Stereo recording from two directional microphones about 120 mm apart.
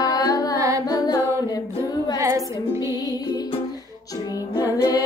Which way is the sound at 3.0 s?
30° left (ahead or behind).